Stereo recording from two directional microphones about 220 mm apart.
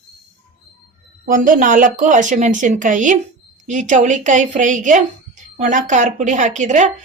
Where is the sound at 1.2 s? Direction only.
40° right (ahead or behind).